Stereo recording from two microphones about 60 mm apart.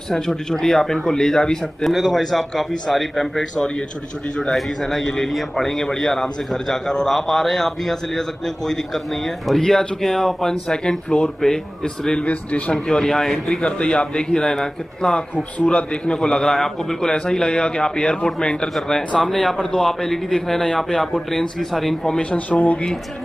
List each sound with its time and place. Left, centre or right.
0.1 s a man's voice: centre
12.7 s a man's voice: centre
22.1 s speech: centre